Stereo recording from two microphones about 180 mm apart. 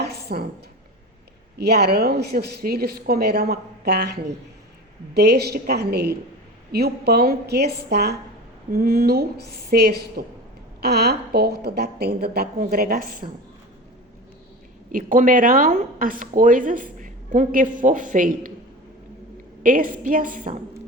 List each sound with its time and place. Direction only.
0.0 s a sound: 60° right (ahead or behind)
1.5 s a woman's voice: 65° right (ahead or behind)
14.9 s speech: 45° right (ahead or behind)
19.6 s speech: 50° right (ahead or behind)